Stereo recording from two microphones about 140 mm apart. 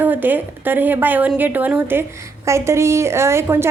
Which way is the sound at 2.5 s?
20° right (ahead or behind).